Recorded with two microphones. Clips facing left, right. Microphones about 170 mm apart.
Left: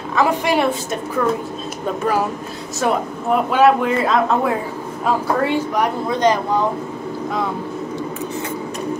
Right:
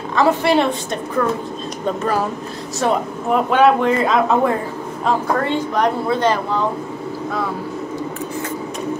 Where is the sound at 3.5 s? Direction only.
5° left (ahead or behind).